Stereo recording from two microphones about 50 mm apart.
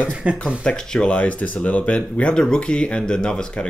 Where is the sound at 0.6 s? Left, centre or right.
Centre.